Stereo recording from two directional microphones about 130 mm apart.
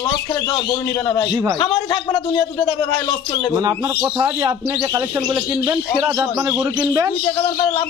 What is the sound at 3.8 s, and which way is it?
Speech, 20° right (ahead or behind).